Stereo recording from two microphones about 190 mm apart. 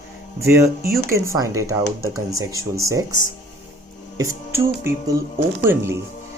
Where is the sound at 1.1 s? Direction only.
15° right (ahead or behind).